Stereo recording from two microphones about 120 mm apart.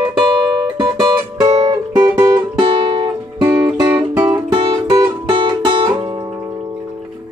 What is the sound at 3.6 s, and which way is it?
Music, 20° right (ahead or behind).